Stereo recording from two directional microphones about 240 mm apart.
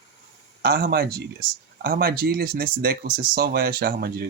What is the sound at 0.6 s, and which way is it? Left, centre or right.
Speech, right.